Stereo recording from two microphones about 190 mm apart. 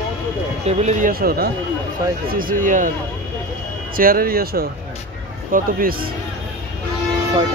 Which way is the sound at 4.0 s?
50° right (ahead or behind).